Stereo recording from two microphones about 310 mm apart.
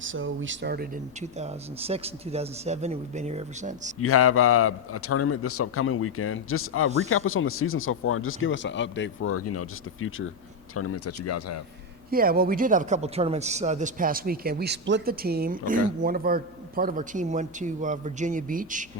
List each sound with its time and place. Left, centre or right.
0.0 s speech: right
4.0 s a man's voice: left
12.1 s speech: right